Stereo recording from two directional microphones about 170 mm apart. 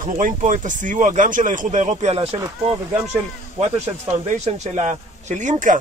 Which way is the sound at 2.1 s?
35° right (ahead or behind).